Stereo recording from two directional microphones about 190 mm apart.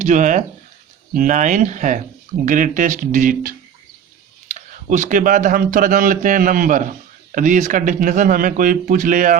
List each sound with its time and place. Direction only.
0.0 s a man's voice: 40° right (ahead or behind)
4.9 s a man's voice: 45° right (ahead or behind)